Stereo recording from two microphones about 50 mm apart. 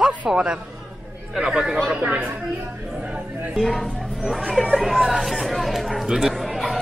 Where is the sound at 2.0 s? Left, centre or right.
Right.